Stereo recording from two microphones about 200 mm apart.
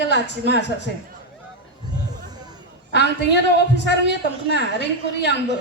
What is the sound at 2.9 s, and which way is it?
A woman's voice, 60° left (ahead or behind).